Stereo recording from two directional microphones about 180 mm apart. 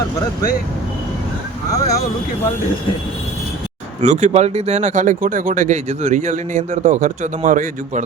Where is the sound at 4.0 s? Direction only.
40° right (ahead or behind).